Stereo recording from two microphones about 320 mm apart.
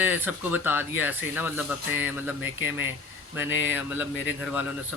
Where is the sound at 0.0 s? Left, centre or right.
Centre.